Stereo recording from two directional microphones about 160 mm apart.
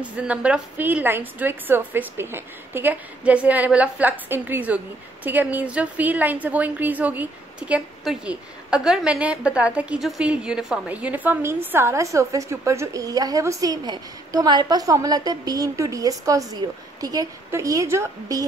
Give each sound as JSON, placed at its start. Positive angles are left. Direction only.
{"t": 0.0, "sound": "a woman's voice", "side_deg": -10}